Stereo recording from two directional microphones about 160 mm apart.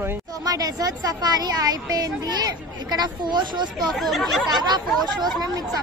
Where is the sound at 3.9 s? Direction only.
Centre (ahead or behind).